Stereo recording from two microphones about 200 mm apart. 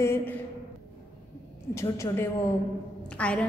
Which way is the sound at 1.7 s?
15° left (ahead or behind).